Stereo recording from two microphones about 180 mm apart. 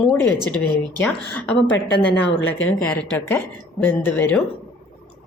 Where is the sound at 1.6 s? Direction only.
80° left.